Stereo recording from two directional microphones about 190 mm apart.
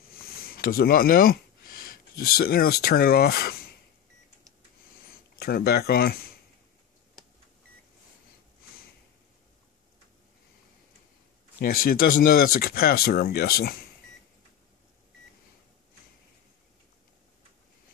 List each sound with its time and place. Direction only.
0.1 s speech: 50° left (ahead or behind)
5.0 s a sound: 55° left (ahead or behind)
11.6 s speech: 50° left (ahead or behind)